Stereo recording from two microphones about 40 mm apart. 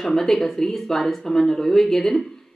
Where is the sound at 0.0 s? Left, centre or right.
Centre.